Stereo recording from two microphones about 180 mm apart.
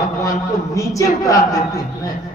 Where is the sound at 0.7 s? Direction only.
15° left (ahead or behind).